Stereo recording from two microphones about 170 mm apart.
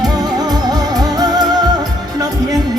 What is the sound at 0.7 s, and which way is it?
Music, 20° right (ahead or behind).